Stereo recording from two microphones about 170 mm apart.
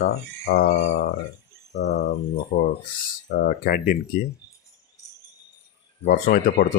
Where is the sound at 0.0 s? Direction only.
65° left (ahead or behind).